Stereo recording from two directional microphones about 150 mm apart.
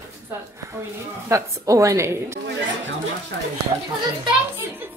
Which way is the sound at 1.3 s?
20° right (ahead or behind).